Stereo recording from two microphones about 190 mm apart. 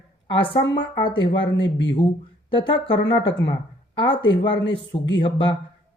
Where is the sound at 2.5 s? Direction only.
25° left (ahead or behind).